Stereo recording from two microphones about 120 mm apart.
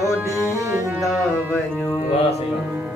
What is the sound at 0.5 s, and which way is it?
Music, 25° right (ahead or behind).